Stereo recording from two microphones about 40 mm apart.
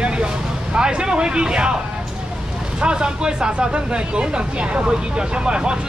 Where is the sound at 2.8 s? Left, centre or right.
Right.